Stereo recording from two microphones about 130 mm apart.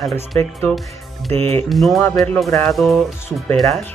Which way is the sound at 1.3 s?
55° right (ahead or behind).